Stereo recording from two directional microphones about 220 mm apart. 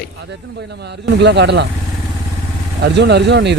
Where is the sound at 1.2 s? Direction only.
50° right (ahead or behind).